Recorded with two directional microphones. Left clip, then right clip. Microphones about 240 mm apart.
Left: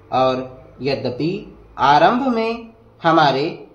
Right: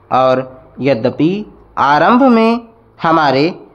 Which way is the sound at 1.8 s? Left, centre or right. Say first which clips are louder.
Right 4 dB; right.